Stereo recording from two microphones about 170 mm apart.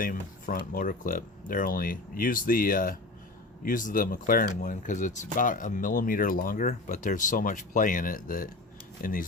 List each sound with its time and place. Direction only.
0.0 s speech: 55° left (ahead or behind)